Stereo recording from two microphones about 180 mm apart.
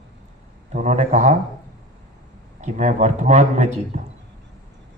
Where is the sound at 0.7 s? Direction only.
40° right (ahead or behind).